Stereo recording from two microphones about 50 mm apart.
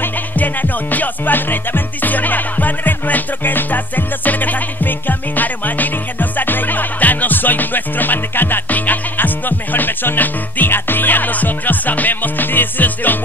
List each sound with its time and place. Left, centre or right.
0.0 s music: left